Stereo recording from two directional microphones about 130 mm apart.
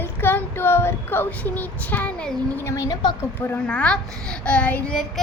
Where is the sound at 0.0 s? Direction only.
15° left (ahead or behind).